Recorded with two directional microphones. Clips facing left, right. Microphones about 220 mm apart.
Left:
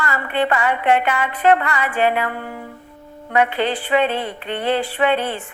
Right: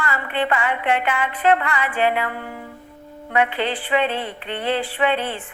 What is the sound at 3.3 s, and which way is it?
A woman's voice, 40° left (ahead or behind).